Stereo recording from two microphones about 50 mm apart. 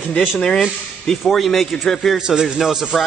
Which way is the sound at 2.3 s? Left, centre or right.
Centre.